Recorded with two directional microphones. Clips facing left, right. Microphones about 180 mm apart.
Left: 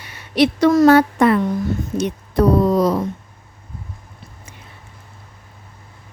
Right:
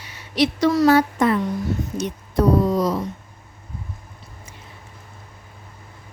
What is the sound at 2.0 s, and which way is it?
Speech, 65° left (ahead or behind).